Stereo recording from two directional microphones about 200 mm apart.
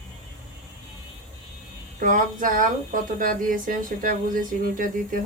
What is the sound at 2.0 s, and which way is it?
Speech, 40° right (ahead or behind).